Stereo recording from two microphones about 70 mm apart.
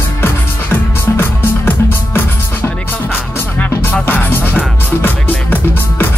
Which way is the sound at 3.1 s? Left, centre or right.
Left.